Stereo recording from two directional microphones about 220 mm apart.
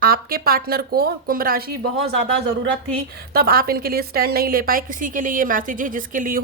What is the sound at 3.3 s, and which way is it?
A woman's voice, 45° right (ahead or behind).